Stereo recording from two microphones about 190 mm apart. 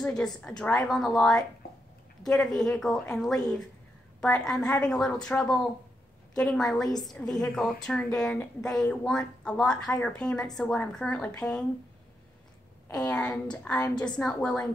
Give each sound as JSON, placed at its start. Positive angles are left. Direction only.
{"t": 0.0, "sound": "a woman's voice", "side_deg": 5}
{"t": 6.9, "sound": "a woman's voice", "side_deg": 20}
{"t": 7.2, "sound": "a woman's voice", "side_deg": 5}
{"t": 12.8, "sound": "a woman's voice", "side_deg": 20}
{"t": 13.1, "sound": "a woman's voice", "side_deg": 5}